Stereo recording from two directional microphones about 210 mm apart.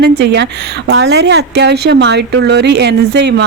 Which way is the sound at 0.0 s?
50° right (ahead or behind).